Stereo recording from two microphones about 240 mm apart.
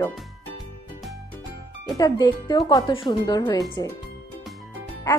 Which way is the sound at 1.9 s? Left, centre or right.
Centre.